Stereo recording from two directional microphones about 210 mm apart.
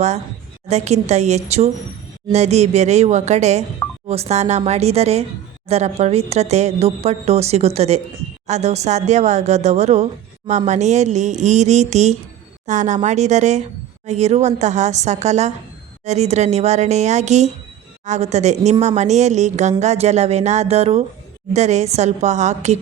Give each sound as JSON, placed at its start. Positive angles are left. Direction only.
{"t": 0.7, "sound": "a woman's voice", "side_deg": -30}